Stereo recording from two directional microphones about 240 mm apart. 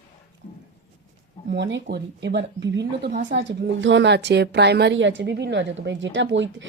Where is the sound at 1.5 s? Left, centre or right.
Right.